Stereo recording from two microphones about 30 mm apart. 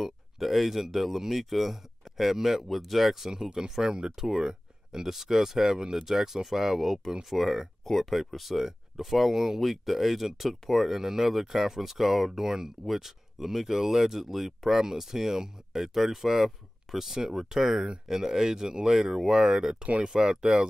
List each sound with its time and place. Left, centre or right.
0.0 s speech: centre
3.3 s speech: right
15.9 s speech: centre
19.8 s speech: right
20.2 s speech: right